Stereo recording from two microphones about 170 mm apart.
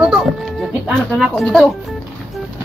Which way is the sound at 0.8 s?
Centre (ahead or behind).